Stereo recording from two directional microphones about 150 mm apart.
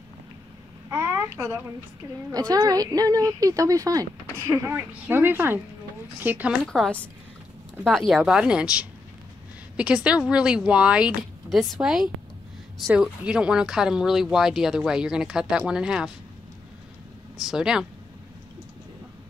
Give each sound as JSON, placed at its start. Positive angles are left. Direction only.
{"t": 0.8, "sound": "a sound", "side_deg": -15}
{"t": 2.3, "sound": "speech", "side_deg": -25}
{"t": 6.5, "sound": "speech", "side_deg": 0}
{"t": 8.1, "sound": "speech", "side_deg": -5}
{"t": 17.4, "sound": "speech", "side_deg": -5}